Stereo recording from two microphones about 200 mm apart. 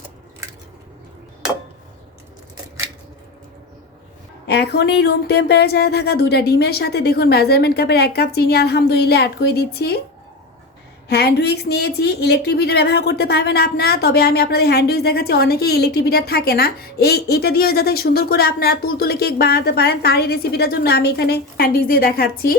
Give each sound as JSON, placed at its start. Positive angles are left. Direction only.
{"t": 4.4, "sound": "speech", "side_deg": 55}
{"t": 11.1, "sound": "speech", "side_deg": 55}